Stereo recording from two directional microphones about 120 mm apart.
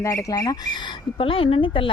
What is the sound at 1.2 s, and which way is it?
Speech, 50° left (ahead or behind).